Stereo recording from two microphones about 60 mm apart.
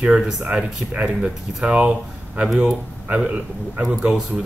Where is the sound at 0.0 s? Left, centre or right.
Centre.